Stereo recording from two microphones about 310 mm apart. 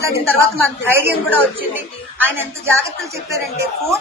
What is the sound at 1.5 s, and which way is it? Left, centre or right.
A woman's voice, centre.